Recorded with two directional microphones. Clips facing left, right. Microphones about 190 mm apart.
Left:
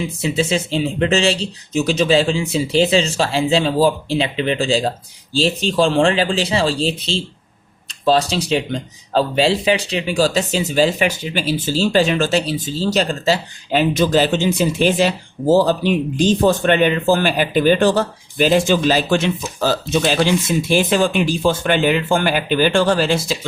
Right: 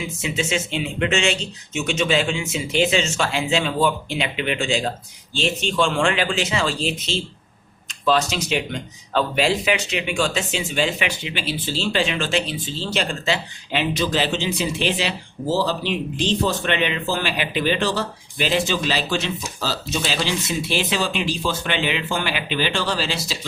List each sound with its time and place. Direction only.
0.2 s speech: 35° left (ahead or behind); by 23.4 s 50° left (ahead or behind)